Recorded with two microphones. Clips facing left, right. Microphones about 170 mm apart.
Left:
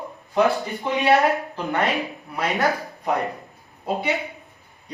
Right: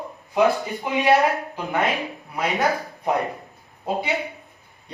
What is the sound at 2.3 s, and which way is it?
Speech, 15° right (ahead or behind).